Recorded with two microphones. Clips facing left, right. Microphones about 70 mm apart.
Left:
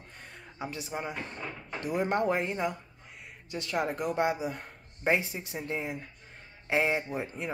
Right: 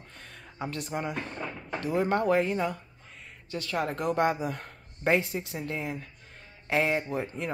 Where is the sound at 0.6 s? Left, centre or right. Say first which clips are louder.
Right 3 dB; centre.